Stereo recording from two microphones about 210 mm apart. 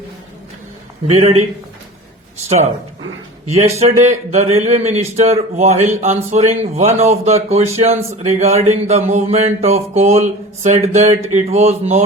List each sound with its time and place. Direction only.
1.0 s a man's voice: 30° right (ahead or behind)
3.4 s speech: 30° right (ahead or behind)